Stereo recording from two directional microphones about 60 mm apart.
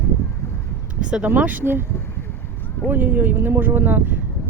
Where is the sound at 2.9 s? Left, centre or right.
Right.